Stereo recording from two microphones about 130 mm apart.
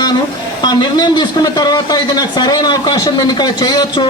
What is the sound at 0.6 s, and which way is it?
Speech, 30° left (ahead or behind).